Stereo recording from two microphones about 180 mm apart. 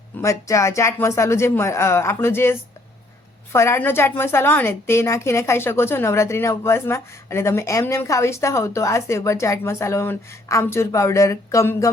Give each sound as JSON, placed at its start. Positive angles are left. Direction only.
{"t": 0.2, "sound": "a woman's voice", "side_deg": 15}